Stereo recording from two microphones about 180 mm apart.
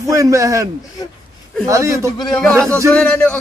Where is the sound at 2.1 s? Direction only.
20° left (ahead or behind).